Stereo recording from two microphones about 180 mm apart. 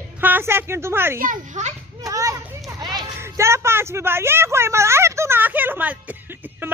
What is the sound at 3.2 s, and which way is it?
Speech, 15° right (ahead or behind).